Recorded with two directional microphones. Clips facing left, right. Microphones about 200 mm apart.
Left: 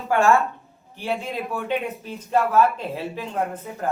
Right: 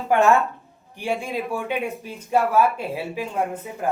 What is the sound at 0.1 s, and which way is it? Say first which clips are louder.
Speech: right 1 dB; 20° right (ahead or behind).